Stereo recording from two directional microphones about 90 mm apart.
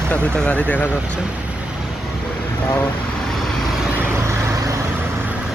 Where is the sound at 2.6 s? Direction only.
25° left (ahead or behind).